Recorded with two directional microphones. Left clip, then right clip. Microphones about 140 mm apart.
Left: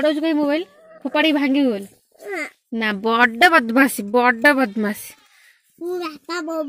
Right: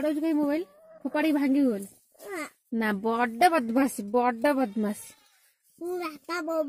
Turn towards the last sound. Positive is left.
turn(degrees=-10)  # may be behind; listen again after turning